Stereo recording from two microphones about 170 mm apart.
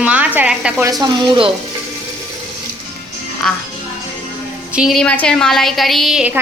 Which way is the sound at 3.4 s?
5° left (ahead or behind).